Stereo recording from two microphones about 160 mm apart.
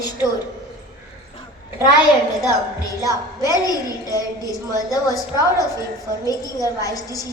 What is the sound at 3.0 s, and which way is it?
A woman's voice, 20° left (ahead or behind).